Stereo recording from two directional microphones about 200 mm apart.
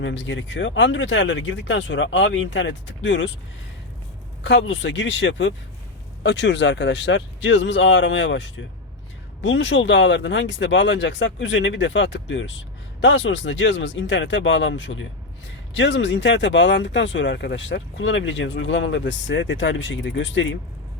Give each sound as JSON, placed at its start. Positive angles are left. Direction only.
{"t": 0.0, "sound": "speech", "side_deg": 65}
{"t": 4.4, "sound": "speech", "side_deg": 65}